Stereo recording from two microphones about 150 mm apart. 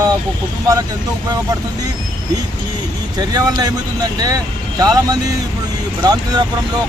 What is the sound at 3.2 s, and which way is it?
Speech, 25° right (ahead or behind).